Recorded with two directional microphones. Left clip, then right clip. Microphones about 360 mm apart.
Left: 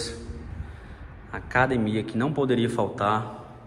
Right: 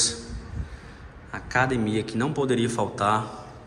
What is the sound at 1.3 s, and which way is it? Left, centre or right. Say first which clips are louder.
Speech: left 1 dB; centre.